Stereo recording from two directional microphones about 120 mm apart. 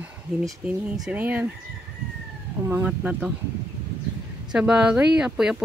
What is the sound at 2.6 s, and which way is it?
Chicken, 20° right (ahead or behind).